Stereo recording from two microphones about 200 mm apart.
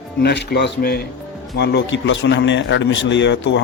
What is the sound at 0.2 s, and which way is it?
Speech, 55° left (ahead or behind).